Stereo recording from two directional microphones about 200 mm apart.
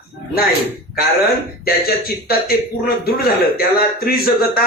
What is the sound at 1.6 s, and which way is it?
A man's voice, 50° left (ahead or behind).